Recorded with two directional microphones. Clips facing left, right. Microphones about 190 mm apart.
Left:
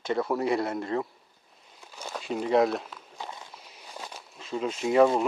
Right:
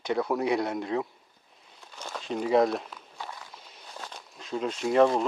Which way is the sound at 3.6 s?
5° left (ahead or behind).